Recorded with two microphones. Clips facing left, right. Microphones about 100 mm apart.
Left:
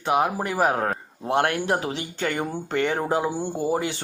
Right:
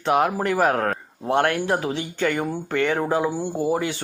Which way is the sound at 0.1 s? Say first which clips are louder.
Right 2 dB; 10° left (ahead or behind).